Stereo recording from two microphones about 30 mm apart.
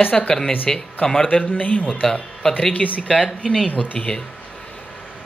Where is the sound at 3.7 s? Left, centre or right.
Left.